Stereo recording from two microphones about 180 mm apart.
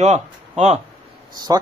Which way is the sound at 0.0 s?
40° right (ahead or behind).